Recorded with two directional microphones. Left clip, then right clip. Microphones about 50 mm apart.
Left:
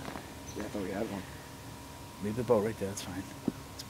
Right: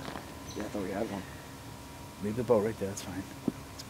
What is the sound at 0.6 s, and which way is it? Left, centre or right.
Speech, centre.